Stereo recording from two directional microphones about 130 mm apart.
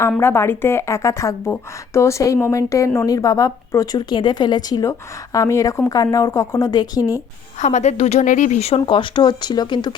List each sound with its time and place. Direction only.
0.2 s a woman's voice: 20° left (ahead or behind)
7.6 s speech: 60° left (ahead or behind); by 9.9 s 35° left (ahead or behind)